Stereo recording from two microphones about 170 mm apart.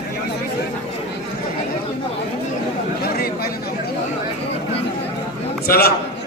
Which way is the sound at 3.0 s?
65° left (ahead or behind).